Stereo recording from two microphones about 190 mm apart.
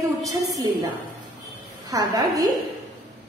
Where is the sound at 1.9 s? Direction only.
20° right (ahead or behind).